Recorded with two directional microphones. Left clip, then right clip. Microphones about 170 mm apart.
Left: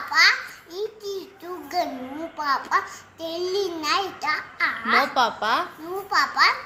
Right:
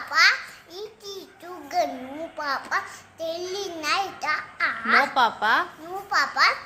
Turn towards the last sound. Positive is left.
turn(degrees=-15)  # may be behind; listen again after turning